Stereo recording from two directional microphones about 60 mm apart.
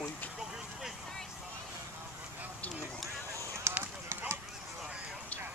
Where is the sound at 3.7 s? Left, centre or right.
Right.